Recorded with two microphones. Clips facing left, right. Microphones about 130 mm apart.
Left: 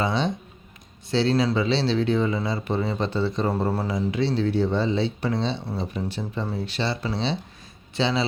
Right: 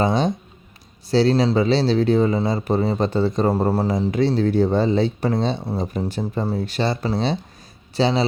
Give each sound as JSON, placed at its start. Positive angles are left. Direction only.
{"t": 0.0, "sound": "a man's voice", "side_deg": -45}